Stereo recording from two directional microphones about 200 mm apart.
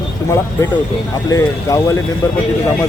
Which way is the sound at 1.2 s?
15° left (ahead or behind).